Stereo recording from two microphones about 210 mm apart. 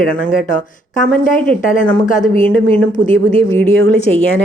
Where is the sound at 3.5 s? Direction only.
10° left (ahead or behind).